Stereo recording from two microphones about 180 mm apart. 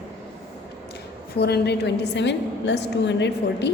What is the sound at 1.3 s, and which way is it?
A woman's voice, 65° left (ahead or behind).